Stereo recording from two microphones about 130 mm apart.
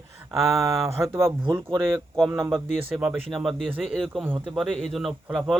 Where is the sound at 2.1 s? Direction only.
Centre (ahead or behind).